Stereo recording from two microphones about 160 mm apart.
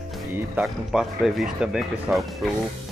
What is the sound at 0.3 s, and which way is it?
Speech, 5° right (ahead or behind).